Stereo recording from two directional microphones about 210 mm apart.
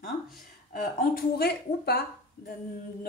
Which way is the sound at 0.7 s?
45° left (ahead or behind).